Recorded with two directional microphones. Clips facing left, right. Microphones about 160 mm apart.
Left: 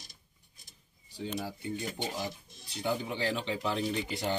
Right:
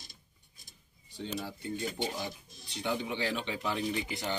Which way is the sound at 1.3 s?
10° left (ahead or behind).